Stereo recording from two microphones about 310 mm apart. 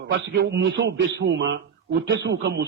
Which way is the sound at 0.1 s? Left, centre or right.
Right.